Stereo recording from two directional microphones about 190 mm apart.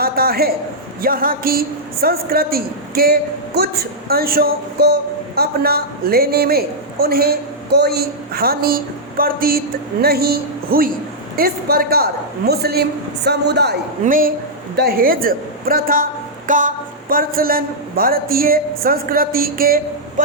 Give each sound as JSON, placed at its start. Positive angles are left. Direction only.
{"t": 0.0, "sound": "a sound", "side_deg": -55}
{"t": 1.0, "sound": "a woman's voice", "side_deg": -50}
{"t": 14.0, "sound": "a woman's voice", "side_deg": -45}